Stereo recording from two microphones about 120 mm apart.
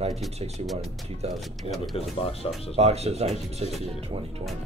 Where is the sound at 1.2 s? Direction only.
60° right (ahead or behind).